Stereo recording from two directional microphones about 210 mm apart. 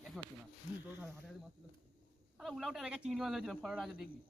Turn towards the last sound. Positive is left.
turn(degrees=-5)  # may be behind; listen again after turning